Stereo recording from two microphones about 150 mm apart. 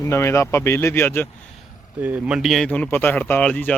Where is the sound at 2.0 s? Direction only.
10° right (ahead or behind).